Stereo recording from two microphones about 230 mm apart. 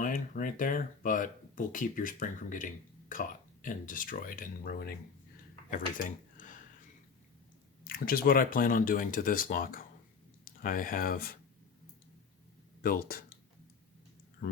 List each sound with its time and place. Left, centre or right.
0.0 s speech: left
7.9 s speech: left
12.8 s speech: left
14.4 s speech: left